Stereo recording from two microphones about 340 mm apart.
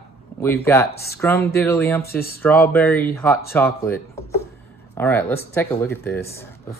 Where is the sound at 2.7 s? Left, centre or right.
Centre.